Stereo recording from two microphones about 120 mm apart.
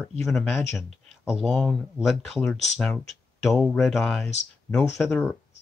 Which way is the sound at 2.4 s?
10° left (ahead or behind).